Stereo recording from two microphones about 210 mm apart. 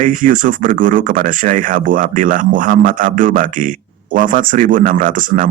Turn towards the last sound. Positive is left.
turn(degrees=-40)  # may be behind; listen again after turning